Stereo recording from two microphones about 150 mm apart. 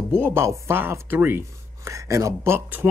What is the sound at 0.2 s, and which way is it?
Speech, 15° right (ahead or behind).